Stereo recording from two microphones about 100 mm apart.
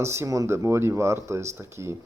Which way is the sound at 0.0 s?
30° right (ahead or behind).